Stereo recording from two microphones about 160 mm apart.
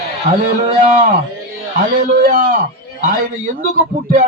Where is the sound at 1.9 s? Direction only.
65° right (ahead or behind).